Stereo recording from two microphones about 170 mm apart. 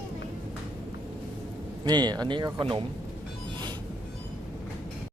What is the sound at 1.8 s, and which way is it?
Speech, 25° right (ahead or behind).